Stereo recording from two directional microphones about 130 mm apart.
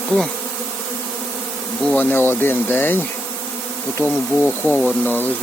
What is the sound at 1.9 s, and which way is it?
Speech, 15° left (ahead or behind).